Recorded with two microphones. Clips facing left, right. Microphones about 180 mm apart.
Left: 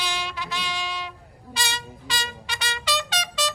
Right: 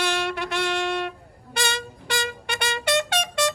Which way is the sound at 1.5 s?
60° right (ahead or behind).